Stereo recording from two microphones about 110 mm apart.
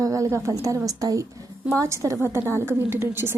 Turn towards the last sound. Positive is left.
turn(degrees=-20)  # may be behind; listen again after turning